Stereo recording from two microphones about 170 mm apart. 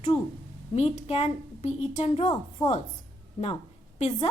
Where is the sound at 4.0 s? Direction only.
40° left (ahead or behind).